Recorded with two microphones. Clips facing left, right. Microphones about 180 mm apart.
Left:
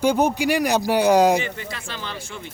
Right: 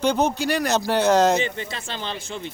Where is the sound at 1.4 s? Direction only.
25° right (ahead or behind).